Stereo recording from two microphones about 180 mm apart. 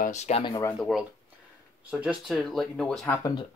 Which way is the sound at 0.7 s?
Centre (ahead or behind).